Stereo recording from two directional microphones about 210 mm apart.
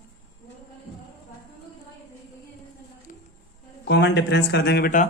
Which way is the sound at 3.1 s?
40° left (ahead or behind).